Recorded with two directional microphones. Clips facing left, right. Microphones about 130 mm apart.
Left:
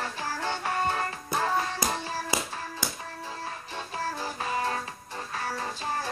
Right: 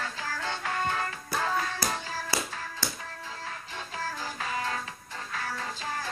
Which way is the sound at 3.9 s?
30° left (ahead or behind).